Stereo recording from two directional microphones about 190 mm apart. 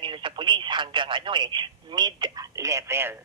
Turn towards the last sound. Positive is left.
turn(degrees=-15)  # may be behind; listen again after turning